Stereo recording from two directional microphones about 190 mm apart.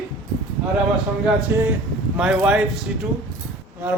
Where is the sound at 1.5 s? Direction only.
10° right (ahead or behind).